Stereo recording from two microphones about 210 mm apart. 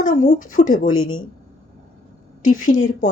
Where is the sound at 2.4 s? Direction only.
40° left (ahead or behind).